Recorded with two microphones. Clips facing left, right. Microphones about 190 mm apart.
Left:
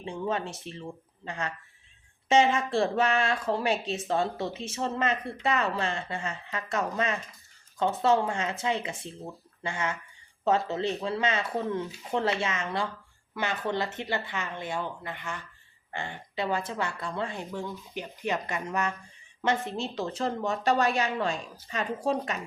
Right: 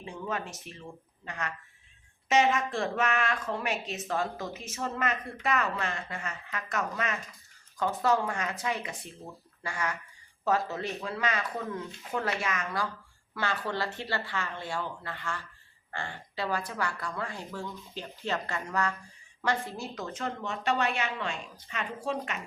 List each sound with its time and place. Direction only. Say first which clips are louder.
0.0 s speech: left 5 dB; 30° left (ahead or behind)